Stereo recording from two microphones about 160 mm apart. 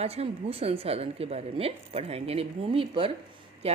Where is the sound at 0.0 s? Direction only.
40° right (ahead or behind).